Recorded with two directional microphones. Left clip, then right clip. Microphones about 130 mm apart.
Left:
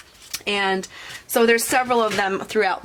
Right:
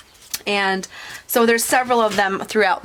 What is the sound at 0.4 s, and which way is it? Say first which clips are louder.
Speech: right 2 dB; 40° right (ahead or behind).